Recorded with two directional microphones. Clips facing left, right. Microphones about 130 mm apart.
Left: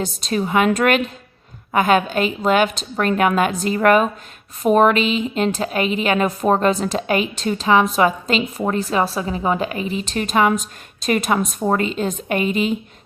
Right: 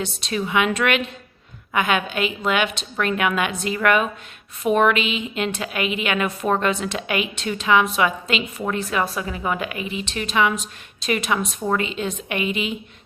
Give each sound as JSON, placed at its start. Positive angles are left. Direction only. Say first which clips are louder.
{"t": 0.0, "sound": "a woman's voice", "louder": "left 4 dB", "side_deg": 40}